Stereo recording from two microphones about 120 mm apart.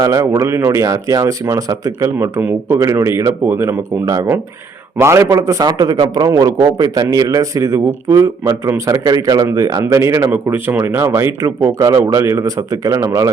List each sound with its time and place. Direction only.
0.0 s a man's voice: 25° right (ahead or behind)
2.7 s a man's voice: 25° right (ahead or behind)